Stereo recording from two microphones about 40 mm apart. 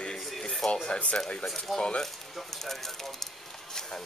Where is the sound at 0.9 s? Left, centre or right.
Left.